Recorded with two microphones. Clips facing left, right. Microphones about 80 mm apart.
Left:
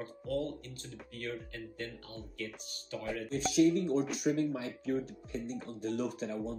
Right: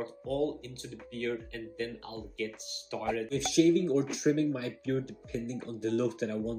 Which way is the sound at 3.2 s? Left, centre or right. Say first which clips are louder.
Right 2 dB; left.